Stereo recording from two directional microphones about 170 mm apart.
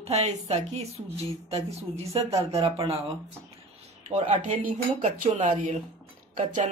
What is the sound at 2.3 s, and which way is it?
Speech, 35° right (ahead or behind).